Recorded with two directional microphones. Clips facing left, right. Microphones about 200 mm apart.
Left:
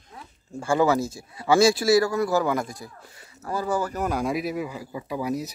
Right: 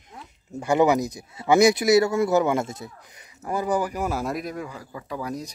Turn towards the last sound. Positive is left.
turn(degrees=5)  # may be behind; listen again after turning